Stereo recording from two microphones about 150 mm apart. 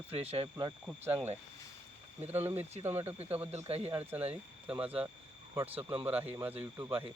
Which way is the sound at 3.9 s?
15° right (ahead or behind).